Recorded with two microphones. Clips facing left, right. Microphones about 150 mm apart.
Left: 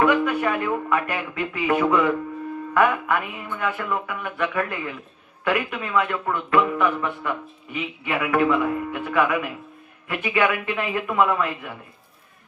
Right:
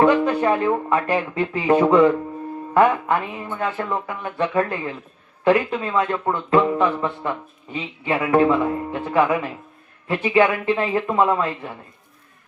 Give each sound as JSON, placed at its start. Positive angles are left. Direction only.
{"t": 0.0, "sound": "speech", "side_deg": -30}